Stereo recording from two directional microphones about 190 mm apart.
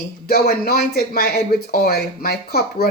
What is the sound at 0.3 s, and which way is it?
Speech, 55° left (ahead or behind).